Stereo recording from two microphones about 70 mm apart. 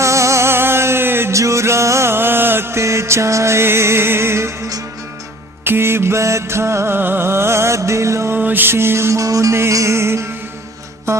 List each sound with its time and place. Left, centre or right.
0.0 s music: right
1.4 s music: right
8.4 s music: right